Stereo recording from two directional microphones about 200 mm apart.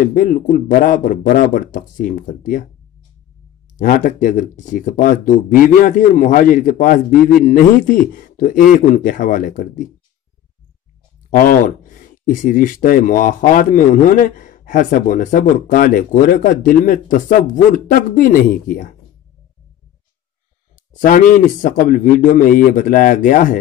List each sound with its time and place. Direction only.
0.1 s speech: 40° left (ahead or behind)
3.7 s speech: 40° left (ahead or behind)
11.2 s speech: 45° left (ahead or behind)
21.0 s speech: 45° left (ahead or behind)